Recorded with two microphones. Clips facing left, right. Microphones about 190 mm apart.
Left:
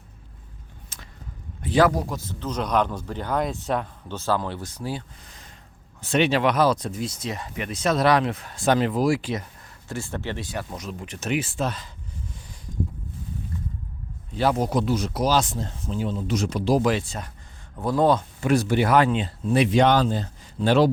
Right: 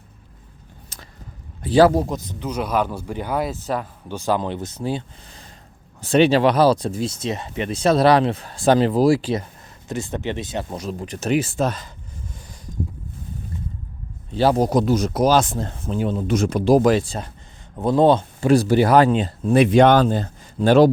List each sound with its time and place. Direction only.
0.9 s a sound: 35° right (ahead or behind)
1.6 s a man's voice: 30° right (ahead or behind); by 3.8 s centre (ahead or behind)
4.1 s speech: 15° right (ahead or behind); by 9.5 s 30° right (ahead or behind)
9.9 s speech: 20° right (ahead or behind)
10.7 s speech: 35° right (ahead or behind)
14.3 s speech: 35° right (ahead or behind)
17.7 s speech: 25° right (ahead or behind); by 20.9 s 45° right (ahead or behind)